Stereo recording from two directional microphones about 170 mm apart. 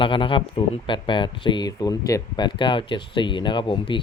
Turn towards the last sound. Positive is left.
turn(degrees=30)  # may be behind; listen again after turning